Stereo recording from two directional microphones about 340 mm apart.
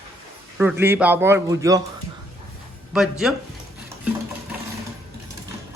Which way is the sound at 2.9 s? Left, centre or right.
Centre.